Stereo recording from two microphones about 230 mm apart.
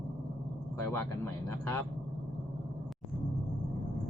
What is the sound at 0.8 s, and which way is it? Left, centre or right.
Speech, centre.